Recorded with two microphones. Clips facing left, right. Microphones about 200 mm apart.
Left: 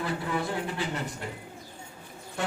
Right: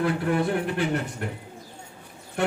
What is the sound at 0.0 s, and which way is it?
A man's voice, 65° right (ahead or behind).